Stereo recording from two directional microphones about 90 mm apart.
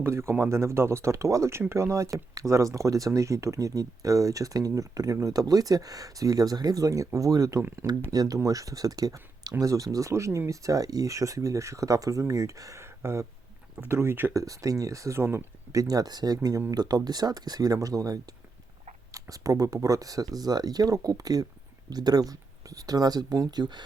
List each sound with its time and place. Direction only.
0.0 s speech: 30° right (ahead or behind)
14.3 s speech: 40° right (ahead or behind)
15.7 s speech: 45° right (ahead or behind)